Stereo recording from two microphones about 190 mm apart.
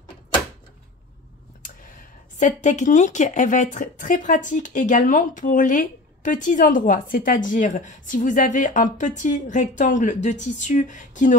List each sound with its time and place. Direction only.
2.3 s speech: 40° left (ahead or behind)